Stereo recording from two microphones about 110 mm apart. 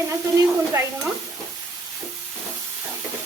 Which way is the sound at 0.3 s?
25° right (ahead or behind).